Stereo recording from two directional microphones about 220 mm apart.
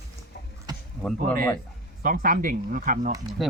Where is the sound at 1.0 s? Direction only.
Centre (ahead or behind).